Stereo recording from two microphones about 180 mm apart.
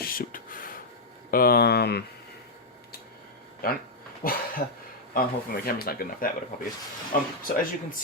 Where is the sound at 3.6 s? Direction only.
55° left (ahead or behind).